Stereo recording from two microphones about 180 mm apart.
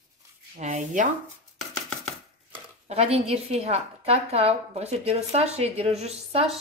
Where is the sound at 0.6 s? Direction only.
40° right (ahead or behind).